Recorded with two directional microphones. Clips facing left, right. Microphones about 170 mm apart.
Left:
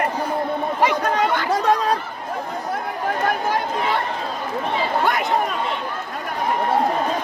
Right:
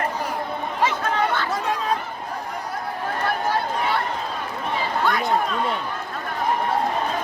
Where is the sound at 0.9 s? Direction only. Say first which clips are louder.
Left 2 dB; 15° left (ahead or behind).